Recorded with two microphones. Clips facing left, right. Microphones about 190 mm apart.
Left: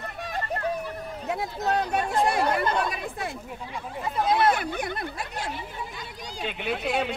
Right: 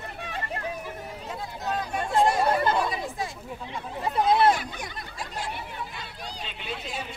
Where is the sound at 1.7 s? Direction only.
70° left (ahead or behind).